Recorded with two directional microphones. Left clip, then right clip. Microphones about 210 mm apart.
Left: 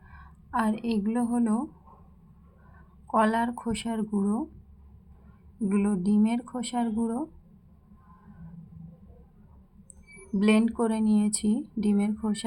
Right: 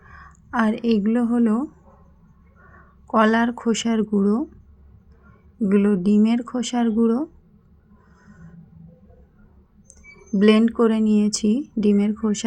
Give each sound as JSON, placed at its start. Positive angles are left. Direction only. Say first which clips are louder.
{"t": 0.1, "sound": "a woman's voice", "louder": "right 3 dB", "side_deg": -20}
{"t": 3.1, "sound": "speech", "louder": "right 6 dB", "side_deg": -20}
{"t": 5.6, "sound": "speech", "louder": "right 9 dB", "side_deg": -15}
{"t": 10.3, "sound": "speech", "louder": "right 8 dB", "side_deg": -20}